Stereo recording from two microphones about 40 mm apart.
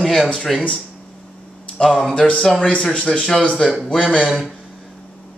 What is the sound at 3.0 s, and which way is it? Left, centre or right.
Speech, centre.